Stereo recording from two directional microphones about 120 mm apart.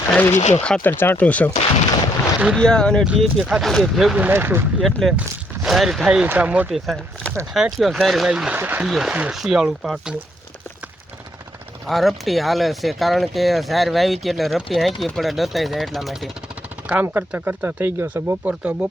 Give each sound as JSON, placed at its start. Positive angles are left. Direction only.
{"t": 0.1, "sound": "speech", "side_deg": 15}
{"t": 0.3, "sound": "speech", "side_deg": 80}
{"t": 0.6, "sound": "speech", "side_deg": 10}
{"t": 2.6, "sound": "speech", "side_deg": 5}
{"t": 4.2, "sound": "speech", "side_deg": -20}
{"t": 4.8, "sound": "speech", "side_deg": 0}
{"t": 6.7, "sound": "speech", "side_deg": 0}
{"t": 8.5, "sound": "speech", "side_deg": -15}
{"t": 8.9, "sound": "speech", "side_deg": -5}
{"t": 11.9, "sound": "speech", "side_deg": 0}
{"t": 16.8, "sound": "speech", "side_deg": -15}